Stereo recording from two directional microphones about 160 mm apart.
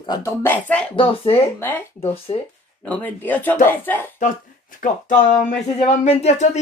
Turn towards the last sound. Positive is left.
turn(degrees=45)  # may be behind; listen again after turning